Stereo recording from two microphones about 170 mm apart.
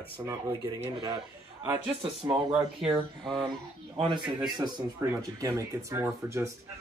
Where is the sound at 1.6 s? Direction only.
15° right (ahead or behind).